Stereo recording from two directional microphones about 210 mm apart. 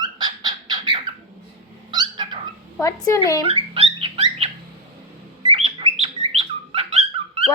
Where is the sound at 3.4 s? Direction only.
25° right (ahead or behind).